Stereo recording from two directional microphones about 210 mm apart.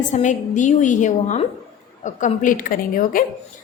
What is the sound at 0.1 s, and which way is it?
A woman's voice, 35° left (ahead or behind).